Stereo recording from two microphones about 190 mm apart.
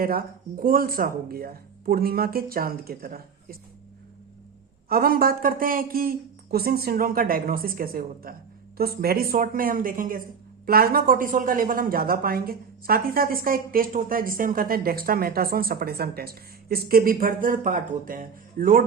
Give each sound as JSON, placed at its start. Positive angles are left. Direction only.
{"t": 0.0, "sound": "speech", "side_deg": -50}
{"t": 4.9, "sound": "speech", "side_deg": -50}